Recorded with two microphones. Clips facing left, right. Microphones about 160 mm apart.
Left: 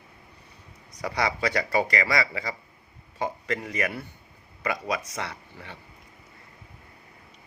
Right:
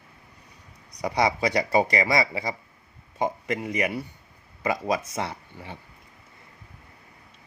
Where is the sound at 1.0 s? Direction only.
20° right (ahead or behind).